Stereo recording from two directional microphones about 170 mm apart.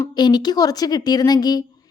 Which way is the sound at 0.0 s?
25° left (ahead or behind).